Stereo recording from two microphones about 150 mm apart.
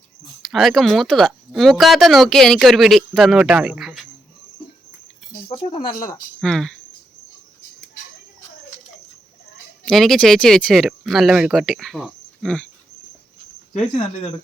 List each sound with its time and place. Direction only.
0.4 s speech: centre (ahead or behind)
5.5 s speech: 35° left (ahead or behind)
5.9 s speech: 20° left (ahead or behind)
6.4 s speech: 5° left (ahead or behind)
9.8 s speech: centre (ahead or behind)
13.9 s speech: 40° left (ahead or behind)